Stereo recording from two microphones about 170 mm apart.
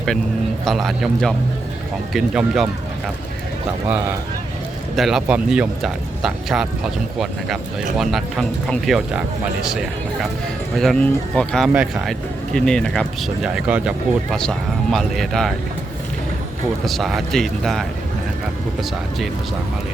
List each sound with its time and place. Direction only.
0.6 s speech: centre (ahead or behind)
4.9 s speech: centre (ahead or behind)
10.8 s speech: 5° left (ahead or behind)
11.7 s speech: 5° right (ahead or behind)
12.5 s speech: 5° left (ahead or behind)
16.8 s speech: centre (ahead or behind)